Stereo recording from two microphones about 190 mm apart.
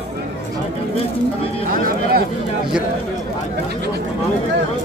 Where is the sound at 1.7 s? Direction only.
45° right (ahead or behind).